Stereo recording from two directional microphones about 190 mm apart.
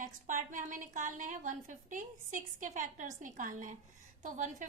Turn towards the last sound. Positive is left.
turn(degrees=-40)  # may be behind; listen again after turning